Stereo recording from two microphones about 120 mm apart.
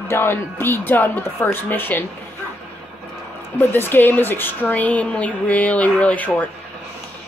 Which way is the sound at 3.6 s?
15° left (ahead or behind).